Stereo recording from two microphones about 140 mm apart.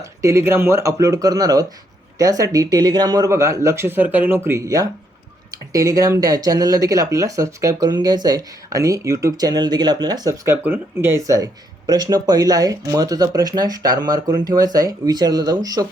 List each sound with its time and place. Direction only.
0.0 s speech: 20° right (ahead or behind)